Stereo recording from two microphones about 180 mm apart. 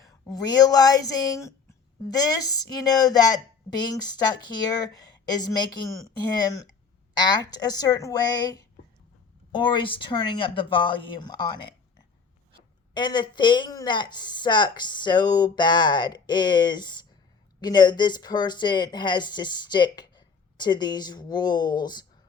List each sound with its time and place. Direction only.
0.0 s speech: 20° left (ahead or behind)
7.1 s speech: 25° left (ahead or behind)